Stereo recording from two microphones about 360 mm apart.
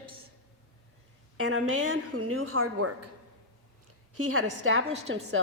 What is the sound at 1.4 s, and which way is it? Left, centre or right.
A woman's voice, right.